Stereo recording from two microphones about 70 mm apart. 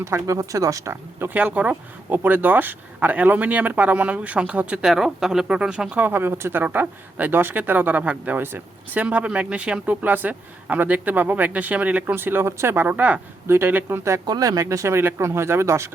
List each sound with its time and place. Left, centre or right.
0.0 s speech: right
1.2 s speech: right
4.9 s speech: centre; by 14.0 s right
14.3 s speech: right